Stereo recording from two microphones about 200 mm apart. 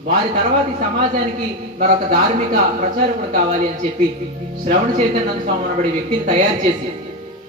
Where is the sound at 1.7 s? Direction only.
50° right (ahead or behind).